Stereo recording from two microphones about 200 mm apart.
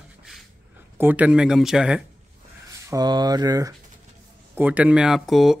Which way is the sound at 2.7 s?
20° right (ahead or behind).